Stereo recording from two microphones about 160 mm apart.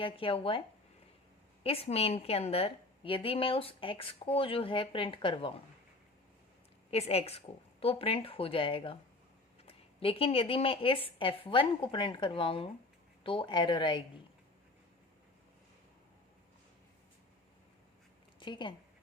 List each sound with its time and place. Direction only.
0.0 s a woman's voice: 35° left (ahead or behind)
1.6 s a woman's voice: 40° left (ahead or behind)
6.9 s a woman's voice: 40° left (ahead or behind)
18.3 s speech: 30° left (ahead or behind)